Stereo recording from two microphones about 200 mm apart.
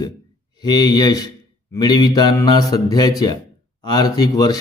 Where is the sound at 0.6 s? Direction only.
20° left (ahead or behind).